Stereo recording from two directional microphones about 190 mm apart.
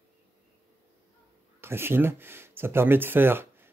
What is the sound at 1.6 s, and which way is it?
Speech, 10° right (ahead or behind).